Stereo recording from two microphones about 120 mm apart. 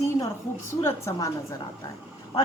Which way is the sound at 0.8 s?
20° left (ahead or behind).